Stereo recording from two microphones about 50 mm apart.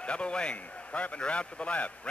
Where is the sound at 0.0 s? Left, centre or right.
Left.